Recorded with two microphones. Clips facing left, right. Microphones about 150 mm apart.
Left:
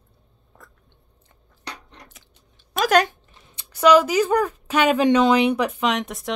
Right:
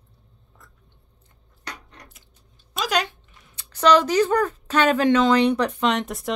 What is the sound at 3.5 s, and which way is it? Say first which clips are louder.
Speech: left 2 dB; 10° left (ahead or behind).